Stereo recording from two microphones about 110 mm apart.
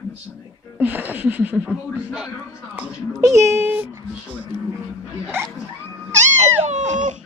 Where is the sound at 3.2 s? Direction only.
25° right (ahead or behind).